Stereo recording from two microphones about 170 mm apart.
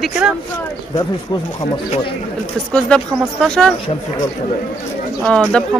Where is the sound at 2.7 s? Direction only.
5° left (ahead or behind).